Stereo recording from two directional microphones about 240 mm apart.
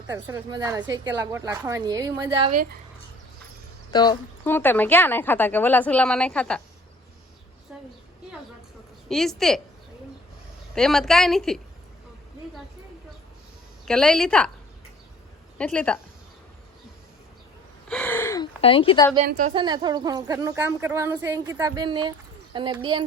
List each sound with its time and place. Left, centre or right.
0.1 s a woman's voice: centre
3.9 s a woman's voice: centre
7.7 s a sound: centre
9.0 s a woman's voice: centre
10.8 s a woman's voice: centre
13.8 s a woman's voice: centre
15.5 s a woman's voice: centre
17.8 s gasp: centre
18.6 s speech: left
19.3 s a woman's voice: right
19.5 s a woman's voice: centre